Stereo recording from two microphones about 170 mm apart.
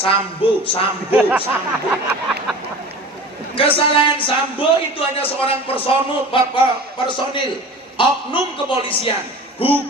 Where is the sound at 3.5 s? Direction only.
35° left (ahead or behind).